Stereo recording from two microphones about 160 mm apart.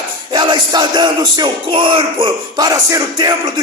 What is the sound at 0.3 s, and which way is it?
Music, 25° right (ahead or behind).